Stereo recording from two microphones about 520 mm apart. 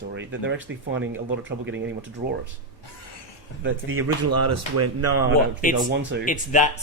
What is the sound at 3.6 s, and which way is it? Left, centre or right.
Speech, right.